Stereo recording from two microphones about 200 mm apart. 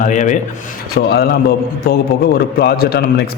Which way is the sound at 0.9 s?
55° left (ahead or behind).